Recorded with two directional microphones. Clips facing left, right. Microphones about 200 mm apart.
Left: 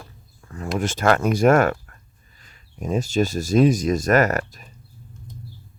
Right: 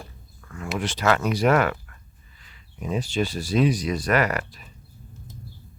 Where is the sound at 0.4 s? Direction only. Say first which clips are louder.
Left 3 dB; 35° left (ahead or behind).